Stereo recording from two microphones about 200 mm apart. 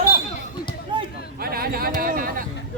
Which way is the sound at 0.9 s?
25° right (ahead or behind).